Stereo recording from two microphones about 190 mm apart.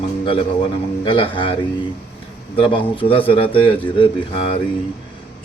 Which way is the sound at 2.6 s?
30° left (ahead or behind).